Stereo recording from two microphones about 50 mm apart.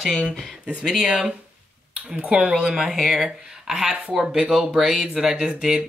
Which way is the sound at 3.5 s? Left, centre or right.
Centre.